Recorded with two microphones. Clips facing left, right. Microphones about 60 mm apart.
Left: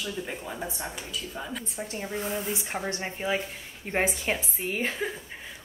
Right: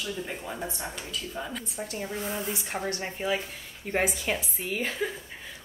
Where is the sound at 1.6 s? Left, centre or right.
Left.